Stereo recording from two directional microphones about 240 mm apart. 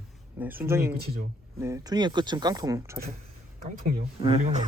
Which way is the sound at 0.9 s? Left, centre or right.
Right.